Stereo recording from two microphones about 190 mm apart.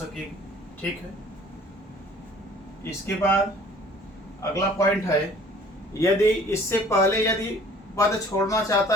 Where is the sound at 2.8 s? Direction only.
10° left (ahead or behind).